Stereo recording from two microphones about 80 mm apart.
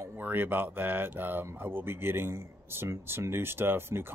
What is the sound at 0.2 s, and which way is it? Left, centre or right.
Speech, right.